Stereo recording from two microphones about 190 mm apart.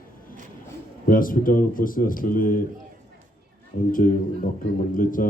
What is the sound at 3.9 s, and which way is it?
A man's voice, 45° left (ahead or behind).